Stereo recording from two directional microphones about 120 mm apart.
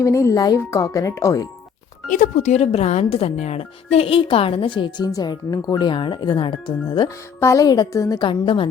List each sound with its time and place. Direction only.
0.0 s speech: 25° left (ahead or behind)
2.0 s speech: 90° left; by 7.1 s 40° left (ahead or behind)
7.3 s speech: 25° left (ahead or behind)
8.2 s speech: 45° left (ahead or behind)